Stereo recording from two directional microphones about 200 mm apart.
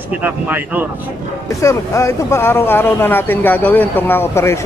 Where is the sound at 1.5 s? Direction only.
15° left (ahead or behind).